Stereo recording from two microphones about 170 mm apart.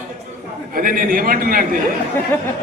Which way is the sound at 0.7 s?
55° right (ahead or behind).